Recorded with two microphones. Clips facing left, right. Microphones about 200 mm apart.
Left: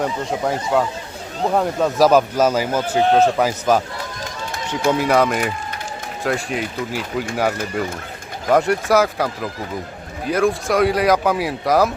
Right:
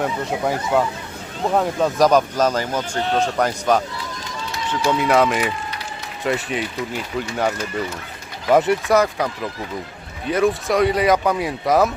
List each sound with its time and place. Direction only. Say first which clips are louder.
0.0 s speech: even; centre (ahead or behind)
3.9 s run: left 1 dB; 50° left (ahead or behind)
4.9 s speech: left 1 dB; centre (ahead or behind)
8.4 s speech: even; centre (ahead or behind)